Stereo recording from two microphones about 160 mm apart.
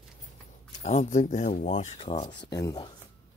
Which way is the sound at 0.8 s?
45° left (ahead or behind).